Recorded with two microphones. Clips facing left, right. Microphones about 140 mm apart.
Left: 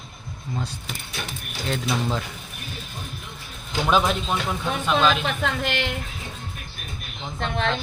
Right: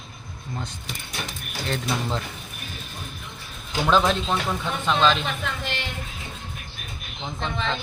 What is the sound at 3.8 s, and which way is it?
Speech, 5° left (ahead or behind).